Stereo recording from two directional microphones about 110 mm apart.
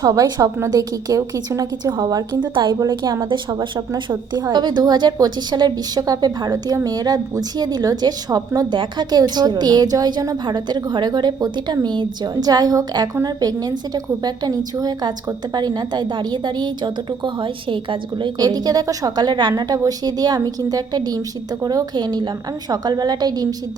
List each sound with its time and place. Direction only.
0.0 s a woman's voice: 30° right (ahead or behind)